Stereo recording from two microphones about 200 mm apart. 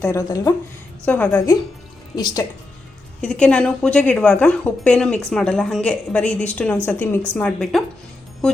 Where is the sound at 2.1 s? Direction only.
20° left (ahead or behind).